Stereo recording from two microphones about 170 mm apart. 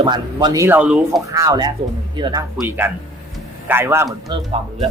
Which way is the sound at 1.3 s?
20° right (ahead or behind).